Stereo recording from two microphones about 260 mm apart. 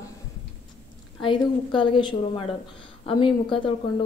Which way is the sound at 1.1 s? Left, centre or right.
Centre.